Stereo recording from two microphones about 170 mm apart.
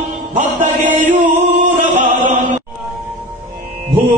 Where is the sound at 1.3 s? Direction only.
45° right (ahead or behind).